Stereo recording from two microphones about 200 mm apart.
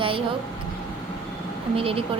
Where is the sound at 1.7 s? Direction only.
30° right (ahead or behind).